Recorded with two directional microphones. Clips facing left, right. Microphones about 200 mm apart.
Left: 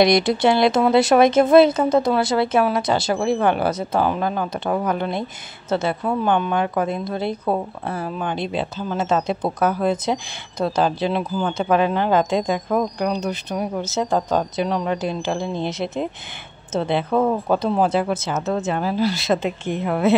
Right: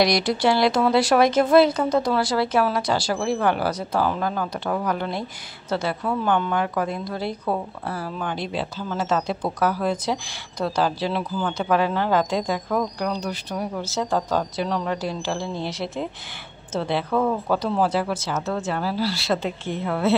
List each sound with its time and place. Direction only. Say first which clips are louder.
0.0 s speech: left 4 dB; 20° left (ahead or behind)